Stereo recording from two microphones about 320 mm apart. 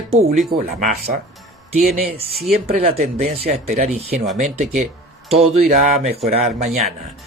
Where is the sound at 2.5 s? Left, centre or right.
Centre.